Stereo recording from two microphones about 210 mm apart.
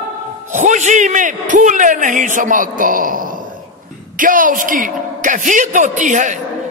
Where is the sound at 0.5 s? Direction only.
35° right (ahead or behind).